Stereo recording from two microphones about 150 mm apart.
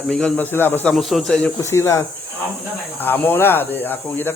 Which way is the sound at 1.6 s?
20° left (ahead or behind).